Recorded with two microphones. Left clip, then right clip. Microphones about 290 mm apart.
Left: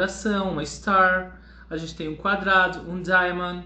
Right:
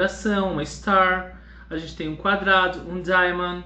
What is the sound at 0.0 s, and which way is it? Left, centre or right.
A man's voice, centre.